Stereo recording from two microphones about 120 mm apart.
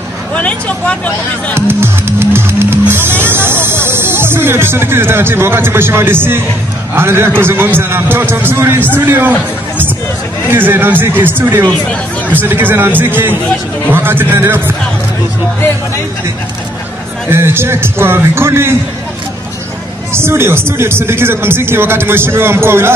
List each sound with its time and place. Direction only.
0.3 s speech: 10° left (ahead or behind)
1.7 s speech: 20° right (ahead or behind)
10.5 s speech: 20° right (ahead or behind)
11.6 s speech: 10° left (ahead or behind)
12.4 s speech: 15° right (ahead or behind)
17.3 s speech: 20° right (ahead or behind)
20.1 s speech: 20° right (ahead or behind)